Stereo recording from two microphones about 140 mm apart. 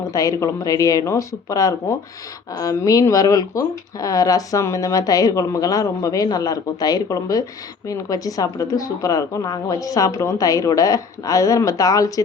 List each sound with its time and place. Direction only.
0.1 s speech: 25° left (ahead or behind)